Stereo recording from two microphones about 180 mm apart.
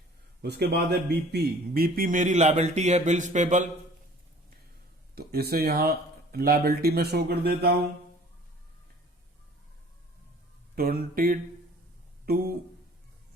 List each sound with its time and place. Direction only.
0.4 s a man's voice: 65° right (ahead or behind); by 3.7 s 40° right (ahead or behind)
5.1 s speech: 60° right (ahead or behind)
10.8 s speech: 55° right (ahead or behind)